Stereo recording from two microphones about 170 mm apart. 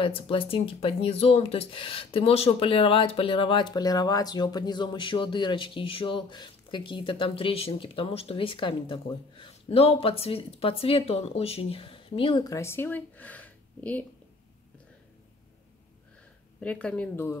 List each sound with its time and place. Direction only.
0.0 s speech: 35° left (ahead or behind); by 14.0 s 10° left (ahead or behind)
16.6 s speech: 5° left (ahead or behind)